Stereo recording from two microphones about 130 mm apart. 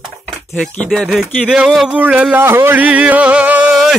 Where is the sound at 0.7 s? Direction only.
10° left (ahead or behind).